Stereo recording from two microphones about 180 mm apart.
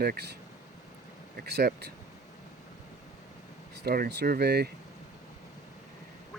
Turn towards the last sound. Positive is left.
turn(degrees=-65)  # may be behind; listen again after turning